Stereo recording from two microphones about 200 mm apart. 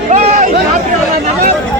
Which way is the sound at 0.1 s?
35° right (ahead or behind).